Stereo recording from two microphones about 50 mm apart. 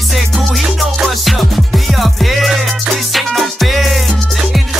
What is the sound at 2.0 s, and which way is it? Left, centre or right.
Music, centre.